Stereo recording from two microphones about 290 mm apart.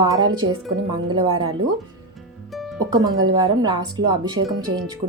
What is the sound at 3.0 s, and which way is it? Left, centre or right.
Speech, centre.